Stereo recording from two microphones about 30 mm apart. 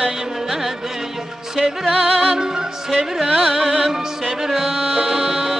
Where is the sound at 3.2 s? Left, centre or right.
Centre.